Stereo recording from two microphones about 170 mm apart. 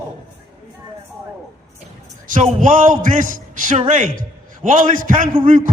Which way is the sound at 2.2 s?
50° right (ahead or behind).